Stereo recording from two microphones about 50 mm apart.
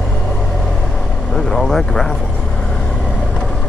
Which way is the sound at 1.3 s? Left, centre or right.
Centre.